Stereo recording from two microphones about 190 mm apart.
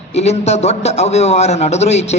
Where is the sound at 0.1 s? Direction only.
35° left (ahead or behind).